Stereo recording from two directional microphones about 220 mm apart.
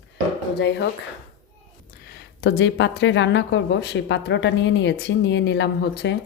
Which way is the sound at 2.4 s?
55° left (ahead or behind).